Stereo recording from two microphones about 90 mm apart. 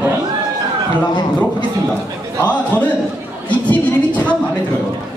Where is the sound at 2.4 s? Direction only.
15° left (ahead or behind).